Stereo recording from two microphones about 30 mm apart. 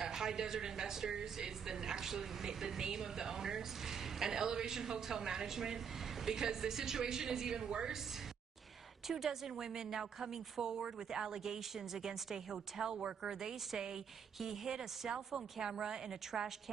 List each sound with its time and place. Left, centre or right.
0.0 s a woman's voice: right
9.0 s a woman's voice: centre
14.8 s a woman's voice: right